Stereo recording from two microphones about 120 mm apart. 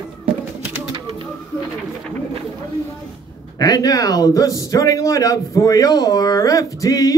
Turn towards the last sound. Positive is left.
turn(degrees=30)  # may be behind; listen again after turning